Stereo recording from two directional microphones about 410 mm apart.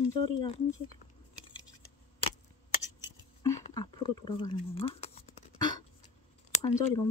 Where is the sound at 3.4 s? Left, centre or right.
Centre.